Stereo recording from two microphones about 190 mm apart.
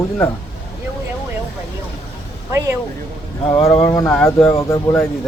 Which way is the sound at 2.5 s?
15° right (ahead or behind).